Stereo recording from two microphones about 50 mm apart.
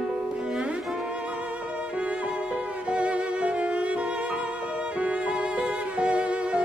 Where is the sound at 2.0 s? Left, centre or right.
Right.